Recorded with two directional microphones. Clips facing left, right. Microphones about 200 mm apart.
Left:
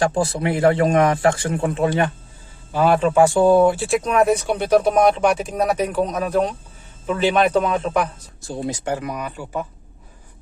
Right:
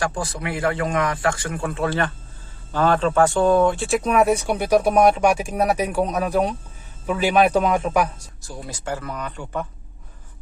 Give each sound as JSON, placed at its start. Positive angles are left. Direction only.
{"t": 0.0, "sound": "a man's voice", "side_deg": 25}
{"t": 8.4, "sound": "speech", "side_deg": 25}